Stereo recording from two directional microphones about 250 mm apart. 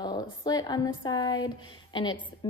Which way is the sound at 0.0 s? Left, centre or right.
Centre.